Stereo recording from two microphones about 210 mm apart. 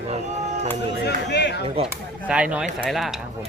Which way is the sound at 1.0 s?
55° left (ahead or behind).